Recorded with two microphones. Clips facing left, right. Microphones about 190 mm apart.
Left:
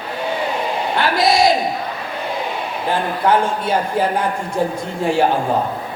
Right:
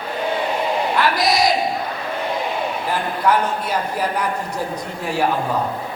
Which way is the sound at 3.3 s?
25° left (ahead or behind).